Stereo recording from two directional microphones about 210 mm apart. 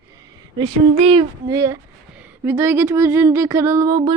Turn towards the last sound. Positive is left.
turn(degrees=-20)  # may be behind; listen again after turning